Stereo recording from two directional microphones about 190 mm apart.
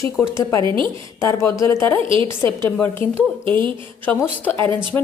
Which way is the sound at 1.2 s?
15° left (ahead or behind).